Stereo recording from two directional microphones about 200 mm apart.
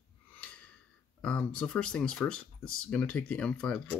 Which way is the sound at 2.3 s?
90° left.